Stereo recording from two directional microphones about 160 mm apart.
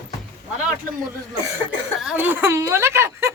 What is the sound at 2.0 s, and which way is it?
Speech, 10° right (ahead or behind).